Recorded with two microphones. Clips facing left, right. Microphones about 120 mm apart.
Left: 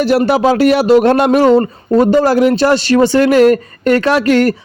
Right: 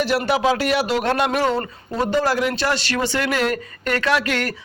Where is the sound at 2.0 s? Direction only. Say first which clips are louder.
Left 7 dB; 35° left (ahead or behind).